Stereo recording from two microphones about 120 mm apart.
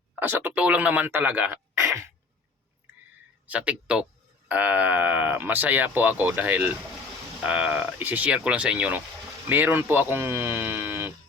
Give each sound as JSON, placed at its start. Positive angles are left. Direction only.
{"t": 0.2, "sound": "speech", "side_deg": -15}
{"t": 1.8, "sound": "a sound", "side_deg": -25}
{"t": 3.4, "sound": "speech", "side_deg": -10}